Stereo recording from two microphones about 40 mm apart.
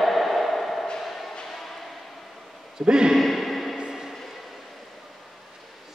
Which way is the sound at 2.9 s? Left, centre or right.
Centre.